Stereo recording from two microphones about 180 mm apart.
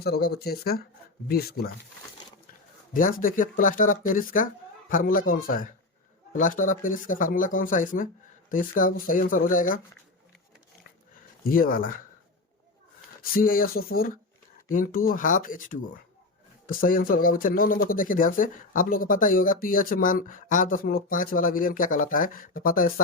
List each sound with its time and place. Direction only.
0.0 s speech: 60° left (ahead or behind)
2.9 s speech: 50° left (ahead or behind)
11.4 s speech: 50° left (ahead or behind)
13.3 s speech: 50° left (ahead or behind)